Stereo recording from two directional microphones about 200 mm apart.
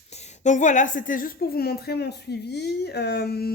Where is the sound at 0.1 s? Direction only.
35° left (ahead or behind).